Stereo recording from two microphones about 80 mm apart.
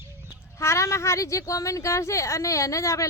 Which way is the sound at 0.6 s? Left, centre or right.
Left.